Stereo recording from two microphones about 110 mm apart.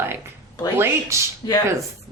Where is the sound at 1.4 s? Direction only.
40° left (ahead or behind).